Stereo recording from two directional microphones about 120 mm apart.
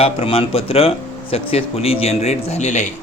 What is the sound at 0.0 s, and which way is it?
Speech, 55° left (ahead or behind).